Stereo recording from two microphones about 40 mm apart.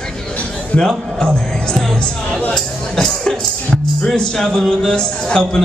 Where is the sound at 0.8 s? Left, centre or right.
Centre.